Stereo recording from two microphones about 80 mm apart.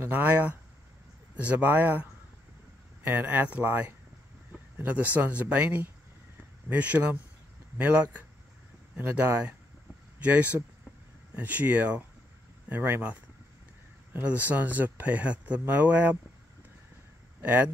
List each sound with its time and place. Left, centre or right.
0.0 s speech: centre
14.2 s speech: centre
17.4 s speech: right